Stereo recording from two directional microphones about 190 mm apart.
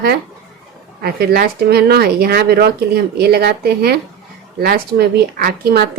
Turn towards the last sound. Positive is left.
turn(degrees=-55)  # may be behind; listen again after turning